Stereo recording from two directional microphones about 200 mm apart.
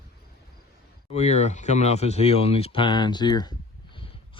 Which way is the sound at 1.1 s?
35° left (ahead or behind).